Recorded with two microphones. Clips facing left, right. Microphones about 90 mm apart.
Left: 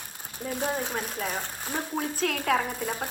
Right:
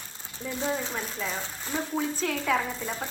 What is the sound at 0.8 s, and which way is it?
Speech, 55° left (ahead or behind).